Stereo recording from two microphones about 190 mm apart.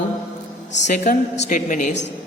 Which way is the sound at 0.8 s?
40° left (ahead or behind).